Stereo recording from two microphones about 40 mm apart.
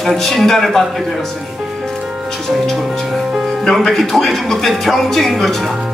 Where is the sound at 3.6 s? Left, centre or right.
Centre.